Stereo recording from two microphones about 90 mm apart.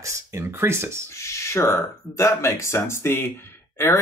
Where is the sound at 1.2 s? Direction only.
30° left (ahead or behind).